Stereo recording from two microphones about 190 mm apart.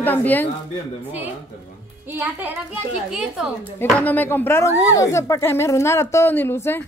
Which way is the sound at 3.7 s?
10° left (ahead or behind).